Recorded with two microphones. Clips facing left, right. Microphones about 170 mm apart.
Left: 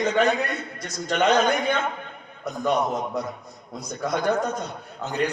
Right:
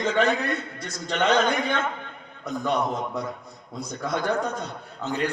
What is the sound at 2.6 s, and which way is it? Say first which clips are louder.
A man's voice: left 3 dB; 15° left (ahead or behind).